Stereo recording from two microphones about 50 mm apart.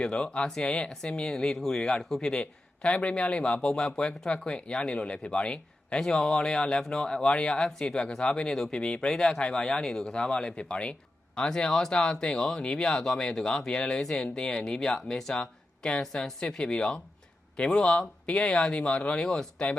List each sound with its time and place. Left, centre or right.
0.0 s speech: centre
2.3 s speech: left
19.2 s speech: centre